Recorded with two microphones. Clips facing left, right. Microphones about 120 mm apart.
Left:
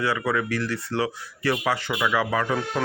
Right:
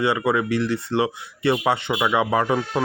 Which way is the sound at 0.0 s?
20° right (ahead or behind).